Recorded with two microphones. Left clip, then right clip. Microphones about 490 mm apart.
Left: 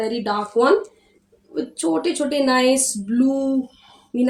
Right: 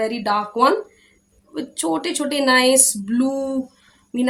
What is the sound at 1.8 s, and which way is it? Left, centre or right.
Speech, right.